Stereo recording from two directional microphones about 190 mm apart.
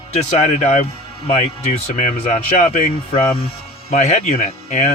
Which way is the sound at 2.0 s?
35° left (ahead or behind).